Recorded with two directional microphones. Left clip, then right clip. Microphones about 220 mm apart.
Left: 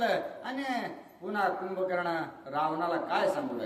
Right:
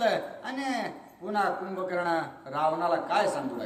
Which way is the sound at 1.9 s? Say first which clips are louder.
Right 3 dB; 15° right (ahead or behind).